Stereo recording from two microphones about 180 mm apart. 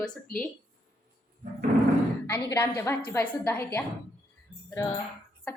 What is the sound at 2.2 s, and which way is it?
A woman's voice, 15° left (ahead or behind).